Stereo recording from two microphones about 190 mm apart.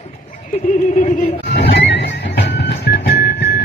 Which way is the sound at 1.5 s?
65° left (ahead or behind).